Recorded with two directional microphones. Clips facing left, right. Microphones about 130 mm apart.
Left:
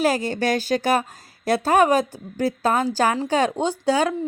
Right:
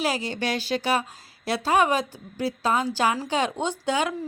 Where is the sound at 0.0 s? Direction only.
45° left (ahead or behind).